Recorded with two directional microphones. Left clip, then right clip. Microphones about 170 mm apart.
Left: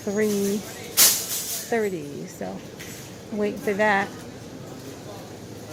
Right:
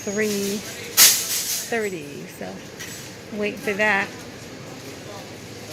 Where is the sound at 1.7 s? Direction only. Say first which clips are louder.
Left 2 dB; 20° left (ahead or behind).